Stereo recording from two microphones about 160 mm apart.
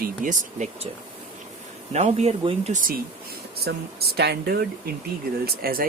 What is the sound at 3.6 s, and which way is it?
Speech, 90° right.